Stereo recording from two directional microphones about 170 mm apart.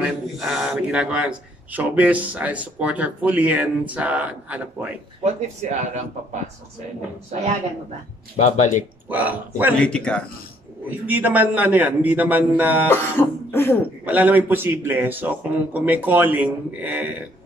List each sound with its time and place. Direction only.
0.4 s speech: 5° right (ahead or behind)
5.2 s speech: 40° right (ahead or behind)
8.4 s speech: 45° left (ahead or behind)
9.1 s speech: 10° right (ahead or behind)
9.8 s speech: 5° left (ahead or behind)
10.9 s speech: 10° right (ahead or behind)
12.8 s throat clearing: 15° left (ahead or behind)
14.0 s speech: 10° right (ahead or behind)